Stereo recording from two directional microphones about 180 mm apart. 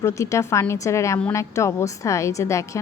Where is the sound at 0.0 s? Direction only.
15° left (ahead or behind).